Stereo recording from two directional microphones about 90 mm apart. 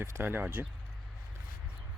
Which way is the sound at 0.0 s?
25° right (ahead or behind).